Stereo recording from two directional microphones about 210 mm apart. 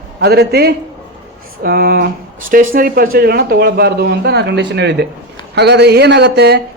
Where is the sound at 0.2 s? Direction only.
50° right (ahead or behind).